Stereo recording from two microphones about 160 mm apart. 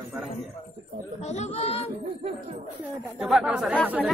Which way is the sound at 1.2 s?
45° left (ahead or behind).